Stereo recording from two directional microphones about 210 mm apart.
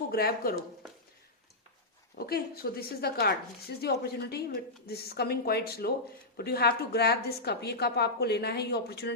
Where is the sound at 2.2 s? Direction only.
45° left (ahead or behind).